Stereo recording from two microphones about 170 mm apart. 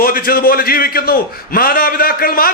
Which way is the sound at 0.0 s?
60° left (ahead or behind).